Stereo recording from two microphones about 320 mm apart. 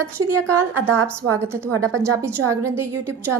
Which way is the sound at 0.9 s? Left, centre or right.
Right.